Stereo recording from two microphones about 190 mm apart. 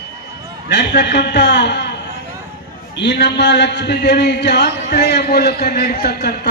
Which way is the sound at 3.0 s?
65° left (ahead or behind).